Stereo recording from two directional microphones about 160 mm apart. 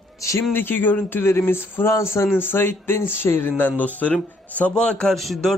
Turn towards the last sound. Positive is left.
turn(degrees=0)  # may be behind; listen again after turning